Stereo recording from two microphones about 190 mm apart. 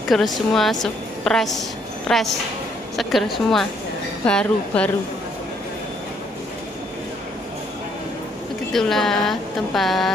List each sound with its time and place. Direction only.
0.1 s a woman's voice: centre (ahead or behind)
8.7 s a woman's voice: centre (ahead or behind)